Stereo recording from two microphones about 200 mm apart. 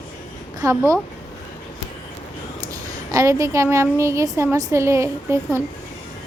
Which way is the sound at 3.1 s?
15° right (ahead or behind).